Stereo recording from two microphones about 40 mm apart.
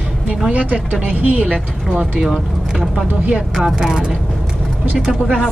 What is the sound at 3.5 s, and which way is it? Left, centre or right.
Speech, centre.